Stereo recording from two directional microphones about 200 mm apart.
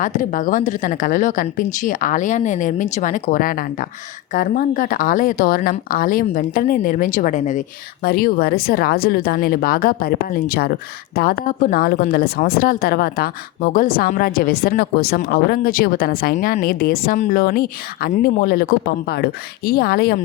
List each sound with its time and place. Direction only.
0.0 s speech: 40° left (ahead or behind)